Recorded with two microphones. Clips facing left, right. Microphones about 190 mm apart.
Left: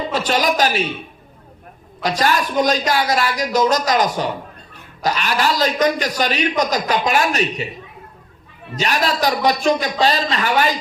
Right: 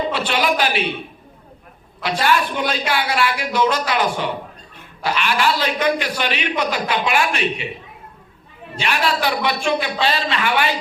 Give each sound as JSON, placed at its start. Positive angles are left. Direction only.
{"t": 0.1, "sound": "a man's voice", "side_deg": 40}
{"t": 2.0, "sound": "a man's voice", "side_deg": 40}